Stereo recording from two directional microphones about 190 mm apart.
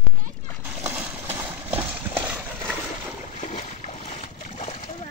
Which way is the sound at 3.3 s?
40° left (ahead or behind).